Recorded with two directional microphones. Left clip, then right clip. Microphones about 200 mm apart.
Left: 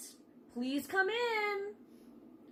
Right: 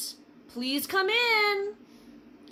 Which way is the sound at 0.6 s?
20° right (ahead or behind).